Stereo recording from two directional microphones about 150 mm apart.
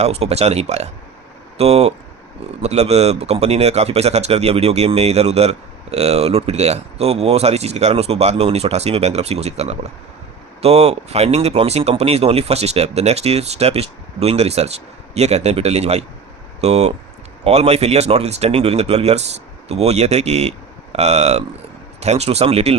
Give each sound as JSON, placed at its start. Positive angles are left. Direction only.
{"t": 0.0, "sound": "speech", "side_deg": -45}